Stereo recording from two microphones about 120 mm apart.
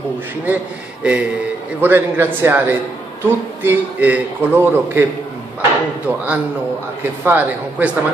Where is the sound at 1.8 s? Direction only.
15° right (ahead or behind).